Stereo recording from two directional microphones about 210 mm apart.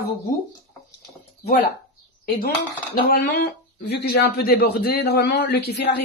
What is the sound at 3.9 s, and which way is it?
A man's voice, 50° left (ahead or behind).